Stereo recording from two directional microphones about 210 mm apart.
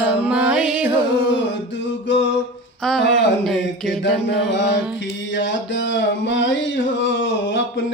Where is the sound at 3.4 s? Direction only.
Centre (ahead or behind).